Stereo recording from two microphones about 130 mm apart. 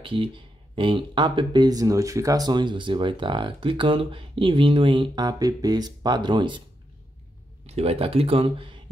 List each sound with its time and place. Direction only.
0.0 s speech: 40° right (ahead or behind)
7.6 s speech: 50° right (ahead or behind)